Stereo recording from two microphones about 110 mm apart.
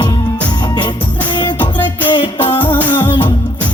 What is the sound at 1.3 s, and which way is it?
Music, 45° left (ahead or behind).